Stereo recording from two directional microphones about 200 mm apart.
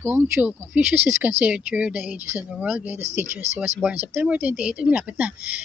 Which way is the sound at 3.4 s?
35° right (ahead or behind).